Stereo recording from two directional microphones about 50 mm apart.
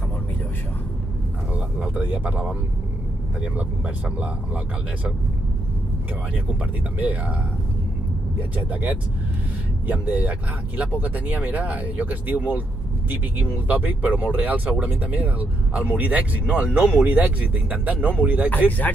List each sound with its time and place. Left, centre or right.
2.0 s speech: right
3.5 s speech: right
7.0 s speech: right
8.4 s speech: right
10.0 s speech: right